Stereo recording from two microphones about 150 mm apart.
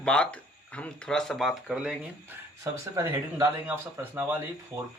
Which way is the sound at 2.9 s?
20° right (ahead or behind).